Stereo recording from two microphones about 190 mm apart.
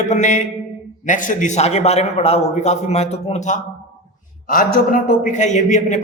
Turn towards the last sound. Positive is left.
turn(degrees=40)  # may be behind; listen again after turning